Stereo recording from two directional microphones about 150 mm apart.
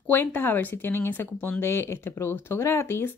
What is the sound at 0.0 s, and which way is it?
Speech, 15° left (ahead or behind).